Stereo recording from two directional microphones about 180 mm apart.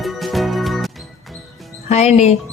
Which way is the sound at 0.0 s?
Centre (ahead or behind).